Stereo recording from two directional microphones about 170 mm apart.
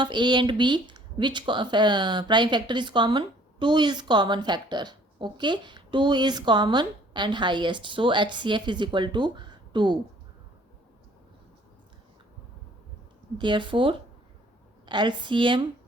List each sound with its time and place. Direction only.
0.0 s speech: 25° right (ahead or behind)
13.4 s speech: 30° right (ahead or behind)